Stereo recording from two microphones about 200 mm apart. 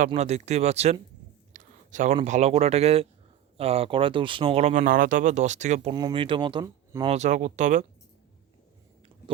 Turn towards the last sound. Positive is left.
turn(degrees=-35)  # may be behind; listen again after turning